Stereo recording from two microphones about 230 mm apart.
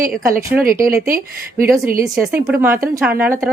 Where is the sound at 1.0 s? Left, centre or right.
Right.